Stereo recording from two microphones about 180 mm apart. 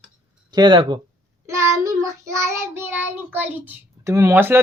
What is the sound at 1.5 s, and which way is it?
Child singing, 15° right (ahead or behind).